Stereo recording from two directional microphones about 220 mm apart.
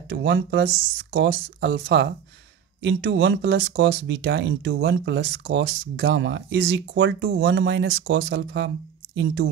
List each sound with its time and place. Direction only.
0.1 s speech: 50° right (ahead or behind)